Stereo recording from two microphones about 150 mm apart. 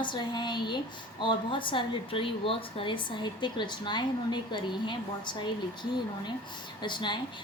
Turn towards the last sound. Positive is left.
turn(degrees=30)  # may be behind; listen again after turning